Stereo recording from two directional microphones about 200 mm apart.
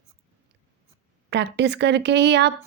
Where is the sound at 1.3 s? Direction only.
60° right (ahead or behind).